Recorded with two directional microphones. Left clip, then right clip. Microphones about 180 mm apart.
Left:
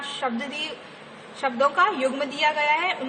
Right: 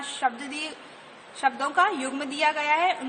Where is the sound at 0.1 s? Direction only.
25° right (ahead or behind).